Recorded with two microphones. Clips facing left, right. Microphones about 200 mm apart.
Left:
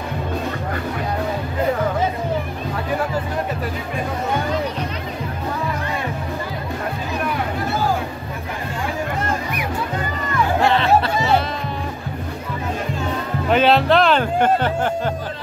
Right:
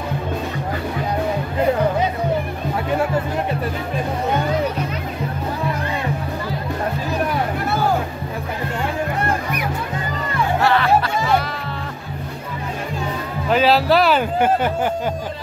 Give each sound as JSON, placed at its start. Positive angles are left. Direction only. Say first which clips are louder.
{"t": 10.6, "sound": "music", "louder": "even", "side_deg": 25}
{"t": 13.5, "sound": "speech", "louder": "even", "side_deg": 0}